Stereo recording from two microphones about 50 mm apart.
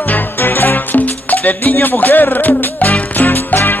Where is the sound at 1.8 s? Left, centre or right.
Left.